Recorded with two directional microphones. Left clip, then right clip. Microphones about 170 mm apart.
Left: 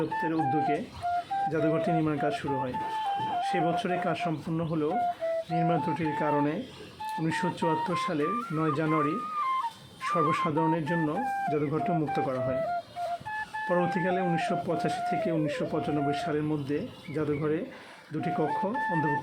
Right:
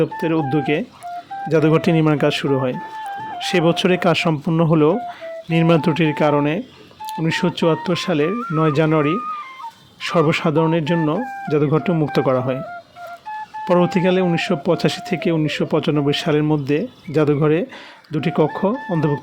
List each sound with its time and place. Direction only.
0.2 s speech: 55° right (ahead or behind)
13.7 s speech: 55° right (ahead or behind)